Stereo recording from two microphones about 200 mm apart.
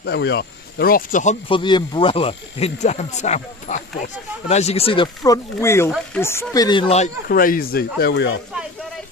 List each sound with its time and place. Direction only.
0.0 s speech: 60° left (ahead or behind); by 1.6 s 35° left (ahead or behind)
1.6 s speech: 25° left (ahead or behind)
7.2 s speech: 45° left (ahead or behind)